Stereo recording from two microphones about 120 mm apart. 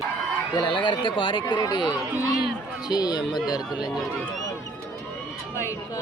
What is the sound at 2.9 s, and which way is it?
Speech, 35° left (ahead or behind).